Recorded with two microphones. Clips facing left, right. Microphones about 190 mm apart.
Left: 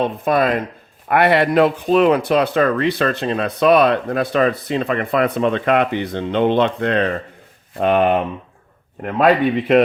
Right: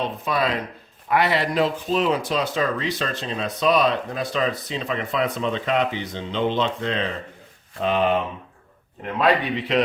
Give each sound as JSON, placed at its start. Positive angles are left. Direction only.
{"t": 0.0, "sound": "speech", "side_deg": 50}